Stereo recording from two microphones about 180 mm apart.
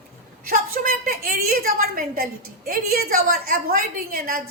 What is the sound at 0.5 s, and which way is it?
A woman's voice, 55° right (ahead or behind).